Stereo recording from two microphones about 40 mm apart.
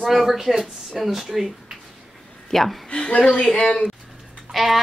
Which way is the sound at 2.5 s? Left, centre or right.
Centre.